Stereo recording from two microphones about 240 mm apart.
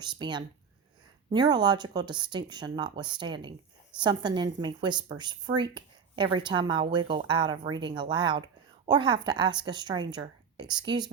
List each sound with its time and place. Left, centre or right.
0.0 s a woman's voice: centre